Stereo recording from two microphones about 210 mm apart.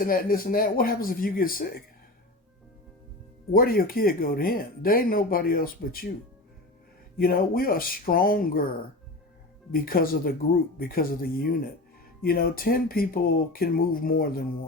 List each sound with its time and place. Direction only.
0.0 s speech: 45° left (ahead or behind)
3.5 s speech: 45° left (ahead or behind)
7.2 s speech: 45° left (ahead or behind)
9.7 s speech: 45° left (ahead or behind)